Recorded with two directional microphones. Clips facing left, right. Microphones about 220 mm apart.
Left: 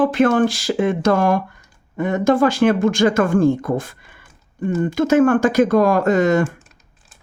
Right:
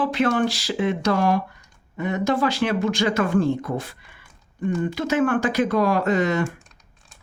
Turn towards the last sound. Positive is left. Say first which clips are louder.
# left 5 dB
turn(degrees=45)  # may be behind; listen again after turning